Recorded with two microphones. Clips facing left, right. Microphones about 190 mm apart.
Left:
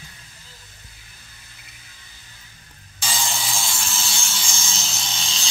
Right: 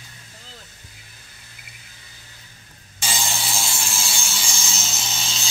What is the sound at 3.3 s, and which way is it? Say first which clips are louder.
Wood: even; 10° right (ahead or behind).